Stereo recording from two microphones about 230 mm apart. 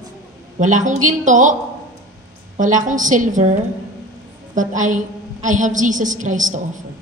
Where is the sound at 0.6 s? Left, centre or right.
Right.